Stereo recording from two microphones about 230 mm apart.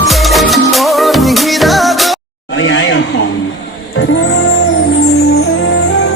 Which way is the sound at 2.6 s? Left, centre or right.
Left.